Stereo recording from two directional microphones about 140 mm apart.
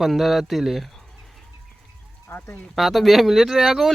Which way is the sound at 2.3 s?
15° left (ahead or behind).